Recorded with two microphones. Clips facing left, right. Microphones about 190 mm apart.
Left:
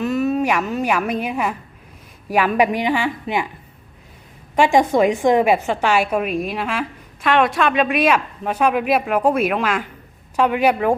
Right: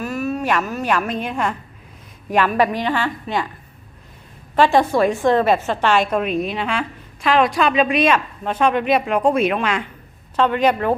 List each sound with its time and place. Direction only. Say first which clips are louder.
0.0 s a woman's voice: left 4 dB; 20° left (ahead or behind)
4.5 s a woman's voice: even; 15° left (ahead or behind)